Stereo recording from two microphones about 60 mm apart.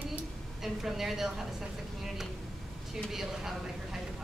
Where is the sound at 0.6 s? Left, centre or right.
Centre.